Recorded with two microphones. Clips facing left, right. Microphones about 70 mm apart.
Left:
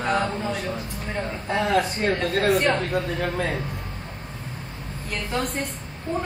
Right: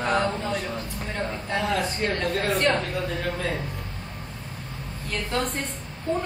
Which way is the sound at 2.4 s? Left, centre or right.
Centre.